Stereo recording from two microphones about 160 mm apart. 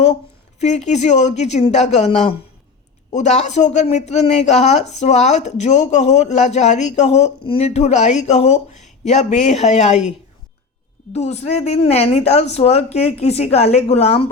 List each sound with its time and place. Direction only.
0.6 s speech: 45° left (ahead or behind)